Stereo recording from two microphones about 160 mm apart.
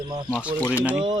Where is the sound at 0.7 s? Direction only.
10° right (ahead or behind).